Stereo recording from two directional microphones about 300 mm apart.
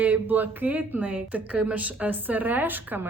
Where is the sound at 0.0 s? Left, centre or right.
Centre.